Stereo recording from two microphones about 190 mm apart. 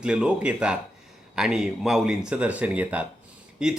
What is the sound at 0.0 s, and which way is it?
A man's voice, 5° right (ahead or behind).